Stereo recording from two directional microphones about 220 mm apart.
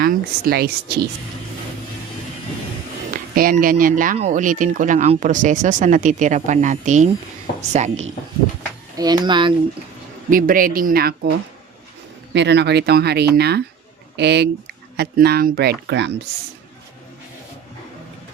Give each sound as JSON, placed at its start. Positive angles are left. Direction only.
{"t": 0.0, "sound": "speech", "side_deg": -40}
{"t": 3.1, "sound": "speech", "side_deg": -40}
{"t": 9.0, "sound": "speech", "side_deg": -20}
{"t": 10.2, "sound": "speech", "side_deg": -40}
{"t": 12.3, "sound": "speech", "side_deg": -50}